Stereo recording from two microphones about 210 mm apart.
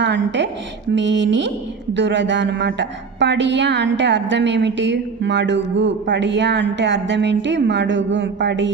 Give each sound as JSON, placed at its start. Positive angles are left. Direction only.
{"t": 0.0, "sound": "speech", "side_deg": -55}